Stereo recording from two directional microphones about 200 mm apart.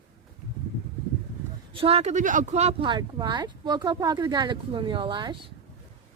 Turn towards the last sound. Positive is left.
turn(degrees=-25)  # may be behind; listen again after turning